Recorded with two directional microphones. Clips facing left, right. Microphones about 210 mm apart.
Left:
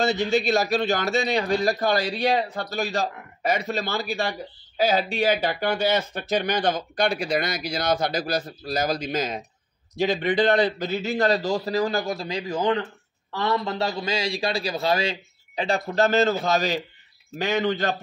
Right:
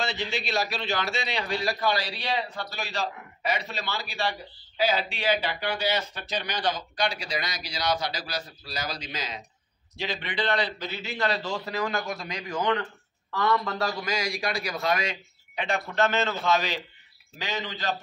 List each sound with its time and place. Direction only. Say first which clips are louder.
0.0 s a man's voice: left 9 dB; 45° left (ahead or behind)
17.4 s a man's voice: left 10 dB; 55° left (ahead or behind)